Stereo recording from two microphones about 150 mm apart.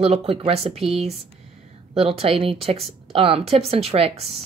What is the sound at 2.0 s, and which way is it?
Speech, 40° right (ahead or behind).